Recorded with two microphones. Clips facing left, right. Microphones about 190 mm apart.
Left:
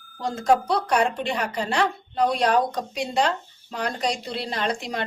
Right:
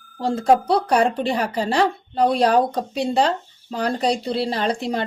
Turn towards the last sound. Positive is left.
turn(degrees=-30)  # may be behind; listen again after turning